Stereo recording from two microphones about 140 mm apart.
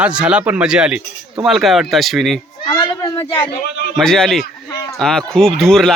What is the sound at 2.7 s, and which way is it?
Children playing, 25° left (ahead or behind).